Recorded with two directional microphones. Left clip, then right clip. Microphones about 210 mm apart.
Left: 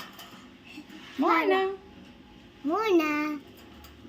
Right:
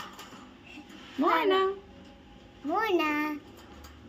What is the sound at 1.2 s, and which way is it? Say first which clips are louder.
Speech: left 1 dB; 20° right (ahead or behind).